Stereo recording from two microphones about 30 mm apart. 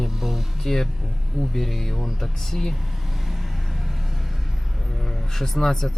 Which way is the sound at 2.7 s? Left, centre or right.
Centre.